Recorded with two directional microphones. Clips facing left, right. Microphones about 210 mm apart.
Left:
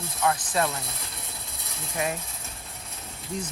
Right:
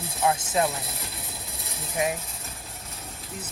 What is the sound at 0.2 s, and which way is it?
Speech, 20° right (ahead or behind).